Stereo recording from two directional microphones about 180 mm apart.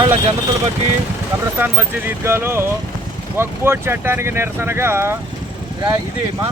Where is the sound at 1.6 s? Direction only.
10° right (ahead or behind).